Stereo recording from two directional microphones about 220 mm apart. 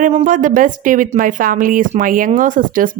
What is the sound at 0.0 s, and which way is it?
A woman's voice, 35° right (ahead or behind).